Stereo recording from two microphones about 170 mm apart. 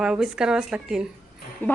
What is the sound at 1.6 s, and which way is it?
Speech, 10° left (ahead or behind).